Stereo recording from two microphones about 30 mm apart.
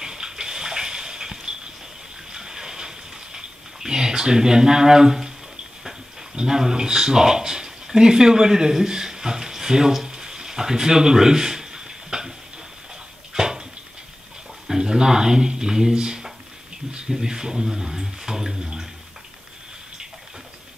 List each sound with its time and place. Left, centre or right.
0.0 s bathtub: right
2.3 s pig: centre
6.4 s speech: centre
10.0 s a sound: right
13.3 s a sound: right
14.7 s speech: right